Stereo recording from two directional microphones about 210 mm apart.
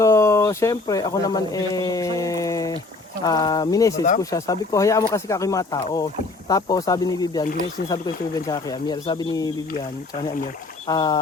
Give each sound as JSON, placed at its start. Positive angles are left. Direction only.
{"t": 0.0, "sound": "speech", "side_deg": 15}
{"t": 10.8, "sound": "speech", "side_deg": 20}